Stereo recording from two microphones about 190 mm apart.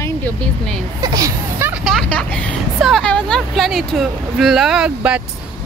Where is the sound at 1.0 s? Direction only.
20° right (ahead or behind).